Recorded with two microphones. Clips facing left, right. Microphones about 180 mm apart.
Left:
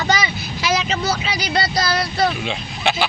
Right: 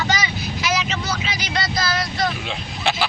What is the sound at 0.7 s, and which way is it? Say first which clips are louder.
Vehicle: left 4 dB; 30° left (ahead or behind).